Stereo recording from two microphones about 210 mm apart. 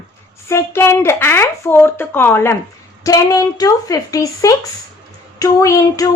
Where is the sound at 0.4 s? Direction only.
10° left (ahead or behind).